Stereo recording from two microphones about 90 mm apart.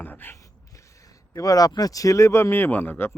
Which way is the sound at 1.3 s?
40° left (ahead or behind).